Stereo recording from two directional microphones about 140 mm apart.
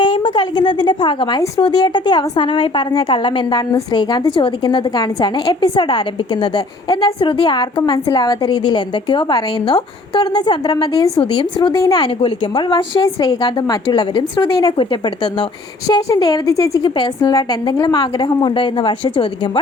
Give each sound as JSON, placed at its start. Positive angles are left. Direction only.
{"t": 0.0, "sound": "a woman's voice", "side_deg": 35}
{"t": 11.7, "sound": "a woman's voice", "side_deg": 20}
{"t": 11.9, "sound": "a woman's voice", "side_deg": 35}